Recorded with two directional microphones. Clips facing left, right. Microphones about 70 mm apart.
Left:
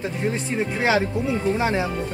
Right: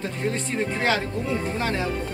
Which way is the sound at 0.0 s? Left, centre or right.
Centre.